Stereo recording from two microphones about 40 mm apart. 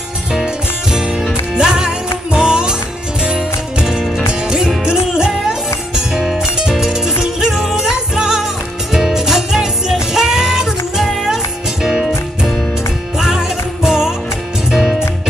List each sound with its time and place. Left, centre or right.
1.5 s music: centre
6.1 s music: centre
6.8 s music: centre
13.2 s music: centre
14.7 s music: centre